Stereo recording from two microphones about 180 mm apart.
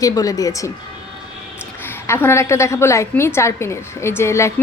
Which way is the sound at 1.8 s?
15° left (ahead or behind).